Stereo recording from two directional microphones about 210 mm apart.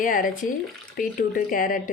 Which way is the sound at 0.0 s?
40° left (ahead or behind).